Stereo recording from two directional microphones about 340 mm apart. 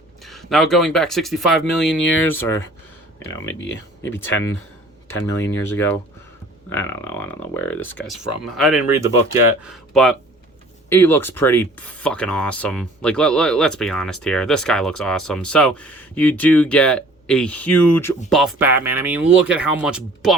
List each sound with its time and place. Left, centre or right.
0.3 s speech: centre
3.6 s speech: left
4.1 s speech: centre